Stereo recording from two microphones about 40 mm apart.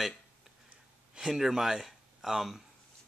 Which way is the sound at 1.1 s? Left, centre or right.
Centre.